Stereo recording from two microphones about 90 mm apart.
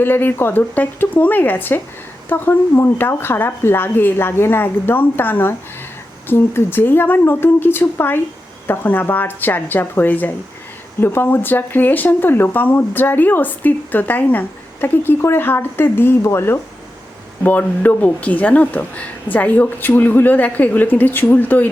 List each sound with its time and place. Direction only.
0.0 s speech: 25° left (ahead or behind)